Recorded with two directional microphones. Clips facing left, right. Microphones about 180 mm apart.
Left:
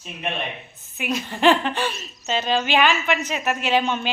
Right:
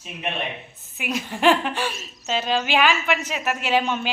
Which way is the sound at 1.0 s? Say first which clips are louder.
Left 1 dB; 10° right (ahead or behind).